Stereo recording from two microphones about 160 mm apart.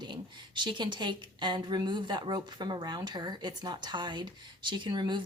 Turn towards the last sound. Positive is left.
turn(degrees=-30)  # may be behind; listen again after turning